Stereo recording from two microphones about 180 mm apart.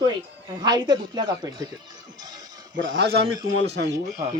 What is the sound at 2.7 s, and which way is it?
Speech, 80° right.